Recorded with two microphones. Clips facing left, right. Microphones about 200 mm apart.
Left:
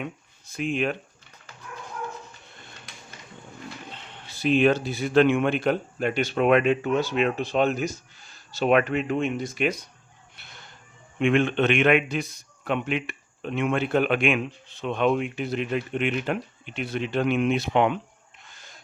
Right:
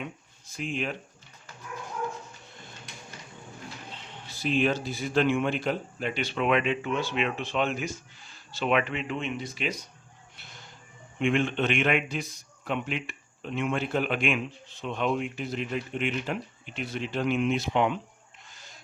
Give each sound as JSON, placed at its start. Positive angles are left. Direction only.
{"t": 0.0, "sound": "a sound", "side_deg": 60}
{"t": 3.9, "sound": "speech", "side_deg": 60}
{"t": 10.3, "sound": "music", "side_deg": 60}
{"t": 11.2, "sound": "a man's voice", "side_deg": 65}